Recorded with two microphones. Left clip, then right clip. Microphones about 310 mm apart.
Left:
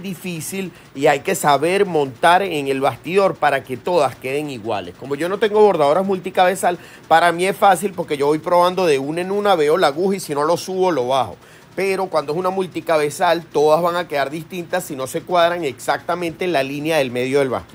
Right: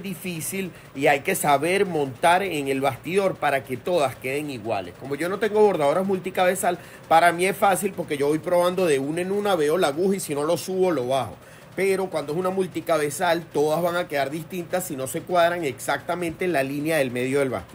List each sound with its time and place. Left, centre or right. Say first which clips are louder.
1.3 s a man's voice: left 5 dB; left